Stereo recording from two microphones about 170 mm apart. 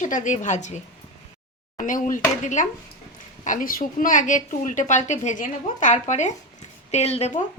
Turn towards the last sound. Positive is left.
turn(degrees=40)  # may be behind; listen again after turning